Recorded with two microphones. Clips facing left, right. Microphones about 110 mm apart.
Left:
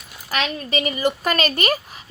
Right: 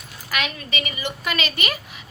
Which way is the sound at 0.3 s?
30° left (ahead or behind).